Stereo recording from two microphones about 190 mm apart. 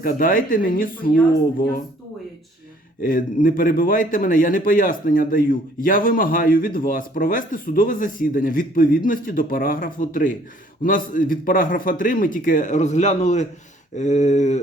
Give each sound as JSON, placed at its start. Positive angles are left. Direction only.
{"t": 0.0, "sound": "a man's voice", "side_deg": 45}
{"t": 3.0, "sound": "a man's voice", "side_deg": 45}
{"t": 13.9, "sound": "a sound", "side_deg": 40}